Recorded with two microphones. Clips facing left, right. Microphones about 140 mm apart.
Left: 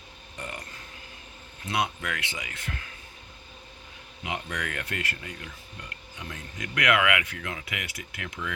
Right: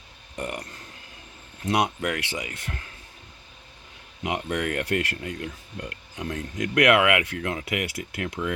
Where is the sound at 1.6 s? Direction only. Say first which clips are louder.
Right 5 dB; 40° right (ahead or behind).